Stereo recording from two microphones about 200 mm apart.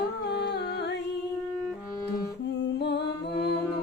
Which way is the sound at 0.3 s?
60° left (ahead or behind).